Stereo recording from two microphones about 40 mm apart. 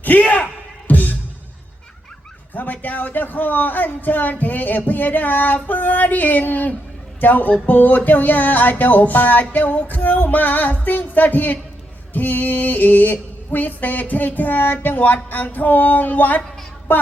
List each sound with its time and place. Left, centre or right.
0.0 s speech: left
0.9 s music: left
2.5 s speech: left